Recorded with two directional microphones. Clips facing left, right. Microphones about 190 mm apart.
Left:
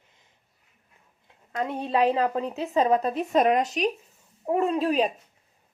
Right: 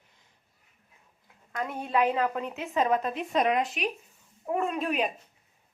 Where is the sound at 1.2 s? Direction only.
30° left (ahead or behind).